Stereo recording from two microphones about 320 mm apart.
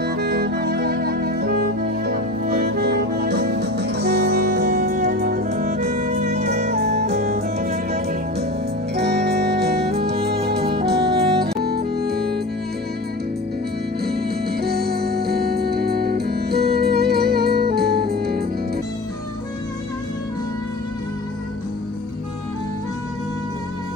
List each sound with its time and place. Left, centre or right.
0.0 s music: right
14.0 s music: right